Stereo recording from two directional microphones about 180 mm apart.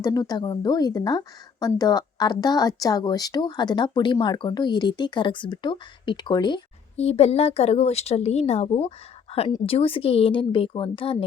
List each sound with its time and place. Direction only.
0.0 s a woman's voice: 20° left (ahead or behind)